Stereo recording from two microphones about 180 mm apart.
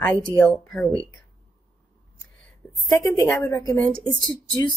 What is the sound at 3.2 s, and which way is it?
Speech, 15° left (ahead or behind).